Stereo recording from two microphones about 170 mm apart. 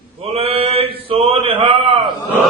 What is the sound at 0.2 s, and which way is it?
Mantra, 35° right (ahead or behind).